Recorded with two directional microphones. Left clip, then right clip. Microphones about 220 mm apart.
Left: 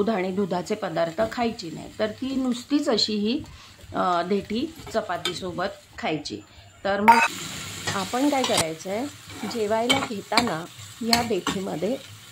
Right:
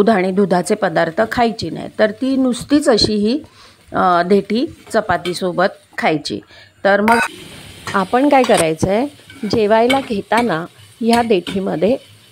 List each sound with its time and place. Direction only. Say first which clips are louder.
0.0 s a woman's voice: right 11 dB; 35° right (ahead or behind)